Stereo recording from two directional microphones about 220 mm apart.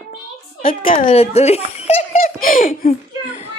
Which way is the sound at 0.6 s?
40° left (ahead or behind).